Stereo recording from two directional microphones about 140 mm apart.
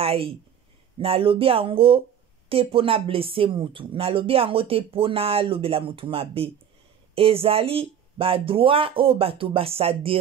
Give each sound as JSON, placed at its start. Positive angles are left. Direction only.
{"t": 0.0, "sound": "speech", "side_deg": -45}